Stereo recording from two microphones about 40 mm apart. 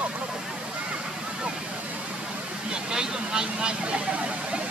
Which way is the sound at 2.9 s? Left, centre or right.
Centre.